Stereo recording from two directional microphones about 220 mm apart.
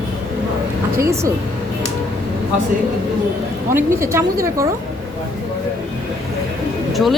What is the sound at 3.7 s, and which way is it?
Speech, 10° right (ahead or behind).